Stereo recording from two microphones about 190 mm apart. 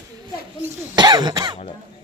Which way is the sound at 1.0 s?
20° right (ahead or behind).